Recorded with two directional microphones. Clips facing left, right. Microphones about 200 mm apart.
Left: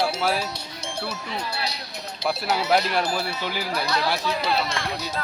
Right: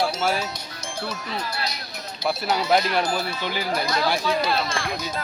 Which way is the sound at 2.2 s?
Centre (ahead or behind).